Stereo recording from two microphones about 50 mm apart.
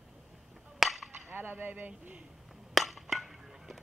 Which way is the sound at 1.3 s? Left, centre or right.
Right.